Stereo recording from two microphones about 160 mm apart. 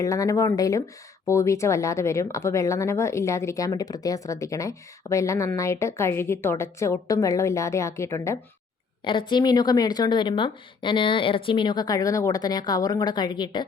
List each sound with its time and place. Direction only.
0.0 s speech: 20° left (ahead or behind)
9.0 s speech: 30° left (ahead or behind)